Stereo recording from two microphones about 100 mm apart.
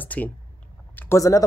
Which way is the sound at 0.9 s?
20° left (ahead or behind).